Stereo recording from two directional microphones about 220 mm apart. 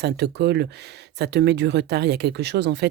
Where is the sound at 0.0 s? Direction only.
50° right (ahead or behind).